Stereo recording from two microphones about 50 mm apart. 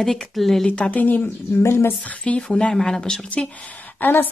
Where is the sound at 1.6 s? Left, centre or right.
Left.